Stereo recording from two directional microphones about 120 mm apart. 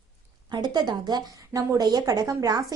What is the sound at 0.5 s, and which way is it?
A woman's voice, 35° right (ahead or behind).